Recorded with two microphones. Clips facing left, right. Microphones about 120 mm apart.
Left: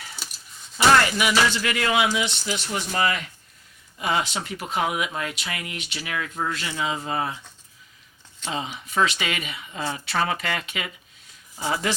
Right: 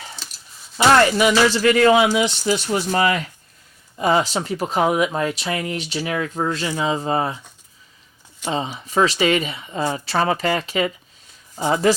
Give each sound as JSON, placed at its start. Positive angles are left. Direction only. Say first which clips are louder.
{"t": 1.2, "sound": "speech", "louder": "right 7 dB", "side_deg": -35}
{"t": 8.4, "sound": "speech", "louder": "right 6 dB", "side_deg": -35}